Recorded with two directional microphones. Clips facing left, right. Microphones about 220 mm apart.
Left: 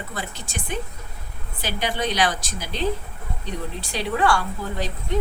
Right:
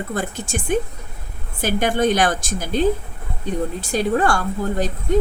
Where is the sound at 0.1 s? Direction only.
50° right (ahead or behind).